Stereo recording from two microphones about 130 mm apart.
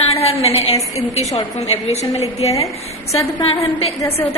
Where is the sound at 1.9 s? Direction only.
55° left (ahead or behind).